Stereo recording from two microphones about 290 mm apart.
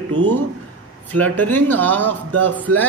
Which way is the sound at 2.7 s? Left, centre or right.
Right.